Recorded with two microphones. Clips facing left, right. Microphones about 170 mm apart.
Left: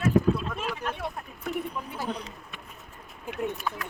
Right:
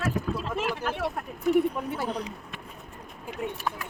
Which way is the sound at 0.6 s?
85° right.